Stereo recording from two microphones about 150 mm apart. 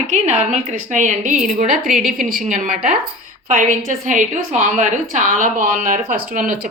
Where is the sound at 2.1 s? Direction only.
65° right (ahead or behind).